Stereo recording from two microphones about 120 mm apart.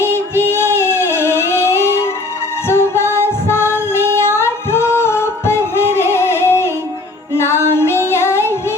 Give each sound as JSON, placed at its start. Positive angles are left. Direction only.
{"t": 0.0, "sound": "music", "side_deg": 20}
{"t": 7.3, "sound": "female singing", "side_deg": 20}